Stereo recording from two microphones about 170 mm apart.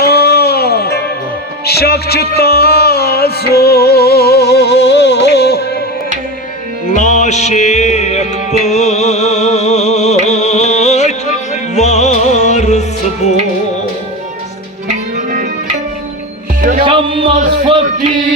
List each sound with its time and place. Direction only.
0.0 s music: 70° left (ahead or behind)
6.9 s music: 45° left (ahead or behind)
14.8 s music: 50° right (ahead or behind)
16.6 s music: 50° right (ahead or behind)
16.8 s music: 30° right (ahead or behind)